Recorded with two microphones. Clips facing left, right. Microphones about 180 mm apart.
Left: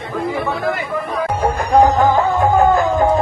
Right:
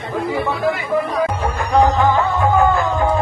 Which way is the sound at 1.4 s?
40° left (ahead or behind).